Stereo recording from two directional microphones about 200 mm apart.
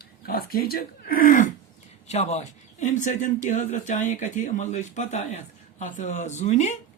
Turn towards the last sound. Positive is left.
turn(degrees=35)  # may be behind; listen again after turning